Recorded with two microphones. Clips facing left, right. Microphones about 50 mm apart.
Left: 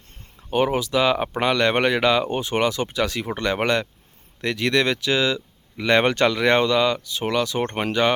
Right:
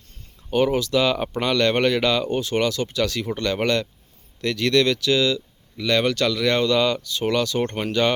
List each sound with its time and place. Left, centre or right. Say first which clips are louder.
0.5 s speech: right 1 dB; centre
6.7 s speech: even; centre